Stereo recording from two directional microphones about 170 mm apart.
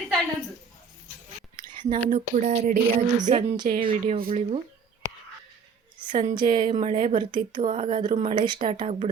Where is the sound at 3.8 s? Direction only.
30° right (ahead or behind).